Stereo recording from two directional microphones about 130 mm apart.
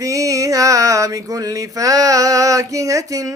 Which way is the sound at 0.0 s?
25° right (ahead or behind).